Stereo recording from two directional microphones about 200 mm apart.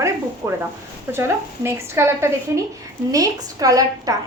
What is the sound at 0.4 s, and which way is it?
A woman's voice, 15° right (ahead or behind).